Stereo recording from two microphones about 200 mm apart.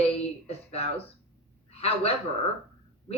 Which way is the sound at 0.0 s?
30° left (ahead or behind).